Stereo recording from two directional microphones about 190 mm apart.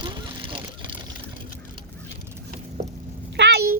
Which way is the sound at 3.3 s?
65° right (ahead or behind).